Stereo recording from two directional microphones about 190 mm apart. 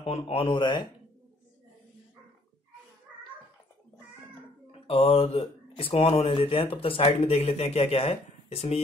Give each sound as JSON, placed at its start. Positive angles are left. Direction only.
{"t": 0.0, "sound": "speech", "side_deg": 30}
{"t": 4.6, "sound": "speech", "side_deg": 30}